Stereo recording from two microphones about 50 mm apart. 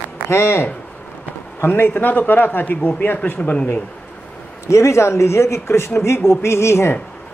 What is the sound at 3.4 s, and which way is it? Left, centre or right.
Speech, left.